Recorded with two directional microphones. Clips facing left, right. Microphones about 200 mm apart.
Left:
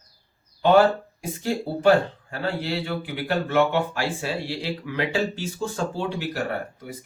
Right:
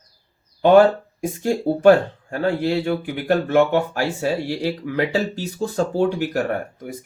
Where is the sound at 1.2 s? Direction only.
50° right (ahead or behind).